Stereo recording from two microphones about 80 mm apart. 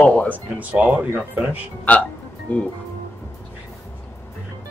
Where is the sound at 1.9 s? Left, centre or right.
Centre.